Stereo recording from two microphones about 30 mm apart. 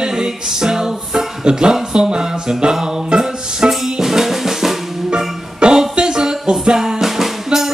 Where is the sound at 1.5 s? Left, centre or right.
Right.